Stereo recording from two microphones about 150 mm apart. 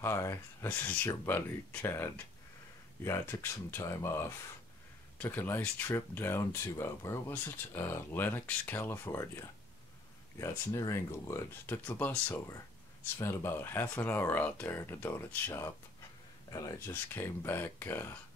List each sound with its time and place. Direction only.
0.0 s speech: 20° left (ahead or behind)
5.2 s speech: 15° left (ahead or behind)